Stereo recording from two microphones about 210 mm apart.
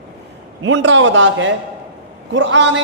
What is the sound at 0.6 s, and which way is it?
A man's voice, 60° right (ahead or behind).